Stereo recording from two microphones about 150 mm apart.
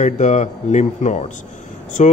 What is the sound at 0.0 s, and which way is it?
A man's voice, 50° left (ahead or behind).